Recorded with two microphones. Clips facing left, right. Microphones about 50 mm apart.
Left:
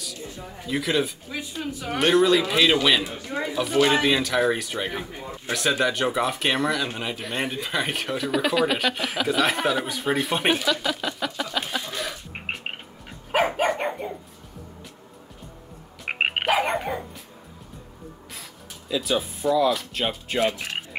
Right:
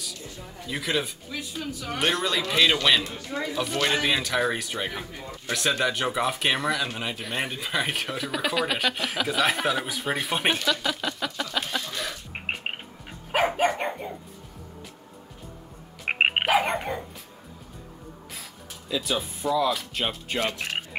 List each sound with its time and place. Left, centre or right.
0.0 s speech: centre
1.6 s speech: left
1.9 s speech: centre
5.1 s speech: left
5.5 s speech: centre
13.3 s dog: centre
16.1 s frog: centre
16.4 s dog: centre
18.9 s speech: centre